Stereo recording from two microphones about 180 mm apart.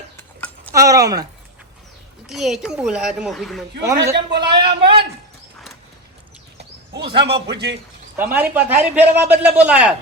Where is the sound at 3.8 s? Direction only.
15° right (ahead or behind).